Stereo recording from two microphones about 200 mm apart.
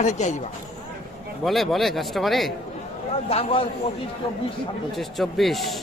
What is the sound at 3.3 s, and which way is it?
Speech, 25° left (ahead or behind).